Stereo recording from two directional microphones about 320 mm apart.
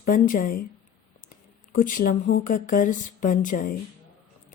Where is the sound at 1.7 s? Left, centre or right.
Left.